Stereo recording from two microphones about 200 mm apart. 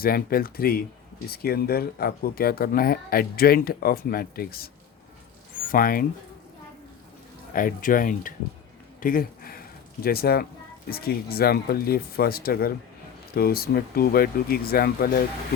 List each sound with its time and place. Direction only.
0.0 s speech: 45° left (ahead or behind)
5.7 s speech: 45° left (ahead or behind)
7.5 s speech: 45° left (ahead or behind)
9.0 s a sound: 45° left (ahead or behind)
10.8 s speech: 50° left (ahead or behind)